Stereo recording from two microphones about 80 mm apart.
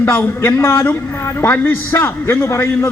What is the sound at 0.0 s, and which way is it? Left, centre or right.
A man's voice, left.